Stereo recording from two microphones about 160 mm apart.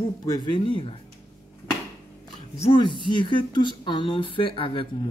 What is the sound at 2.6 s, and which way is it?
Speech, 30° left (ahead or behind).